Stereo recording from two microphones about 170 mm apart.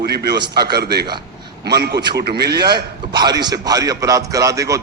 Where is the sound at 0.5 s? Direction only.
70° right (ahead or behind).